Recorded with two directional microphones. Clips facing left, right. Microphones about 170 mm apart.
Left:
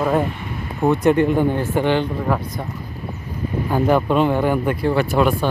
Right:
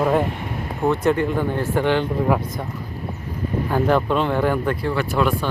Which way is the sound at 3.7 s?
10° left (ahead or behind).